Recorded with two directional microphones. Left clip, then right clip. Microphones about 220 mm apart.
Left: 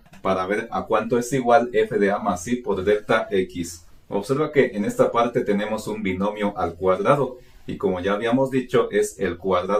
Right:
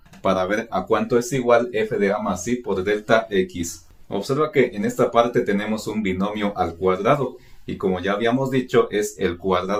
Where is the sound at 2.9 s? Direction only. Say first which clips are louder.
Right 1 dB; 40° right (ahead or behind).